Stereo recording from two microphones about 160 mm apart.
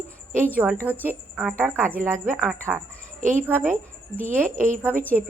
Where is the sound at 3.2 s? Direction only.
55° right (ahead or behind).